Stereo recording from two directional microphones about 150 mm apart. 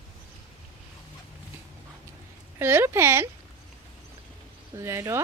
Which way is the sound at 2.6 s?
15° right (ahead or behind).